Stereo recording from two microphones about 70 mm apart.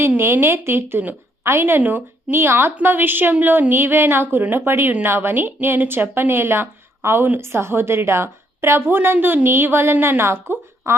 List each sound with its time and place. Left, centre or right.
0.2 s a woman's voice: right